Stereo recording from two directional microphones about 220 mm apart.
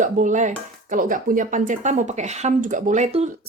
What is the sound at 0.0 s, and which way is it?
Speech, 35° right (ahead or behind).